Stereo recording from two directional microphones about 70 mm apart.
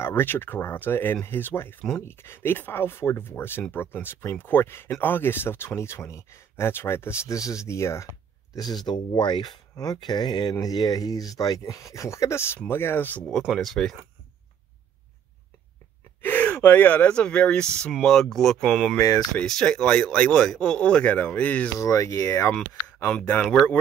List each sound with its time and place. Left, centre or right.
0.0 s speech: left
7.3 s speech: left
8.5 s speech: left
10.6 s speech: left
13.5 s speech: centre
16.2 s speech: left; by 18.9 s centre
18.9 s speech: left
19.4 s speech: centre
21.7 s speech: left
23.0 s speech: left
23.4 s speech: centre